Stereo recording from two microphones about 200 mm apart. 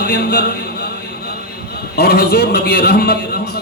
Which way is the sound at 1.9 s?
50° left (ahead or behind).